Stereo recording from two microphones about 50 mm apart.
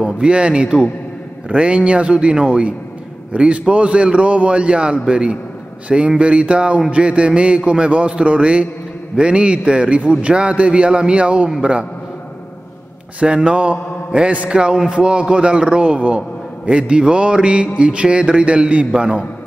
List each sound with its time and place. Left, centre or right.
0.0 s mantra: right
13.2 s mantra: centre